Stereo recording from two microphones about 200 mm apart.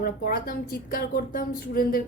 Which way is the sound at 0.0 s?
45° left (ahead or behind).